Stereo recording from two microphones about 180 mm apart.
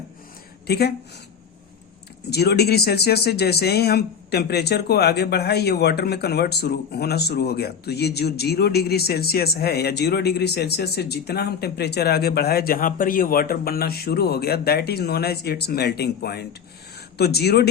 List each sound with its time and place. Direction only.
0.7 s speech: 65° left (ahead or behind)
2.3 s speech: 65° left (ahead or behind)